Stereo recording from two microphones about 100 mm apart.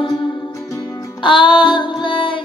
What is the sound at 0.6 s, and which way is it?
Music, 30° left (ahead or behind).